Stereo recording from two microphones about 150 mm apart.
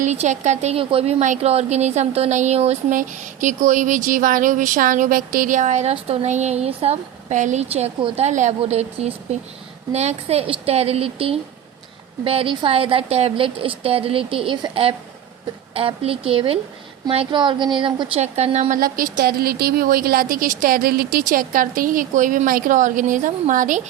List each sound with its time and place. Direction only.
0.0 s speech: 50° right (ahead or behind)
1.2 s speech: 50° right (ahead or behind)
2.9 s a woman's voice: 60° right (ahead or behind); by 18.2 s 30° right (ahead or behind)
18.2 s speech: 45° right (ahead or behind)
18.7 s a woman's voice: 65° right (ahead or behind)